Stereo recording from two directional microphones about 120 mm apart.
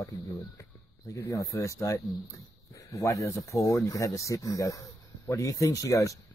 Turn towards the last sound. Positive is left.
turn(degrees=25)  # may be behind; listen again after turning